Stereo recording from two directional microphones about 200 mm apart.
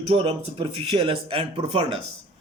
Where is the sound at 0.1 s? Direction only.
25° right (ahead or behind).